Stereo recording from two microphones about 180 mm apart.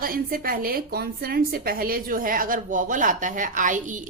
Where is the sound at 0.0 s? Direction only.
55° right (ahead or behind).